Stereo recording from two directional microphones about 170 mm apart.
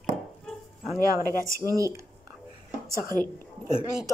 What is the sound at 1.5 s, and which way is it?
Speech, 20° right (ahead or behind).